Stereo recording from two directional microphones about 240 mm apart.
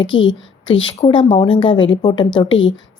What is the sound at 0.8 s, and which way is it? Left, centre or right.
A woman's voice, centre.